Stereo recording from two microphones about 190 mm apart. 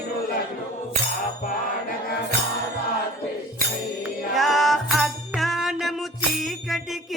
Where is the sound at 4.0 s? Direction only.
Centre (ahead or behind).